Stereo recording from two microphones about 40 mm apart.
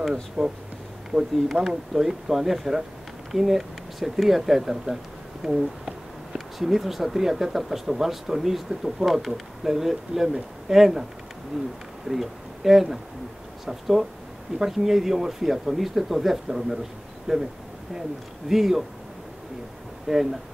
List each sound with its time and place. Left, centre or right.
0.0 s speech: centre
1.1 s speech: right
1.5 s speech: centre
12.1 s speech: centre
18.5 s speech: centre
20.1 s speech: centre